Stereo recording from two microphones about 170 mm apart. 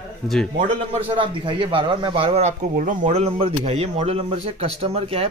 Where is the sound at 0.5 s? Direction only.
30° right (ahead or behind).